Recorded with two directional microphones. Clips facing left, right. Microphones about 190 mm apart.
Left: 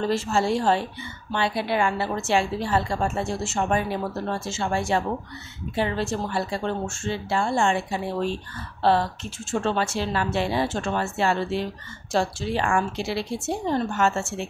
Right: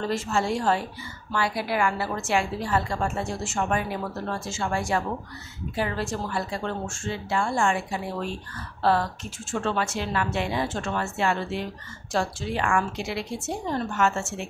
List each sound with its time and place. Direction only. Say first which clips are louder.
0.0 s a woman's voice: left 3 dB; 30° left (ahead or behind)